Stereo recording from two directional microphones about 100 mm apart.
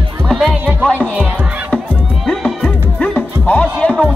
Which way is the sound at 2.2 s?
5° left (ahead or behind).